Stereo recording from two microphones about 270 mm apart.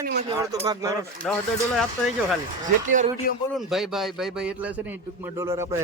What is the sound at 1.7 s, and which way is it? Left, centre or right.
Speech, centre.